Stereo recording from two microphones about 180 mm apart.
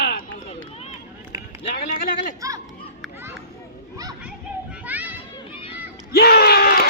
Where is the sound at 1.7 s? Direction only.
55° left (ahead or behind).